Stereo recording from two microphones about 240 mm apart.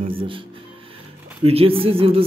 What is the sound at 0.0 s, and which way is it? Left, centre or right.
Speech, right.